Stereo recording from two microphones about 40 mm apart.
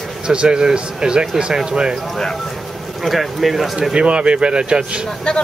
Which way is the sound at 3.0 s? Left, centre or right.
Centre.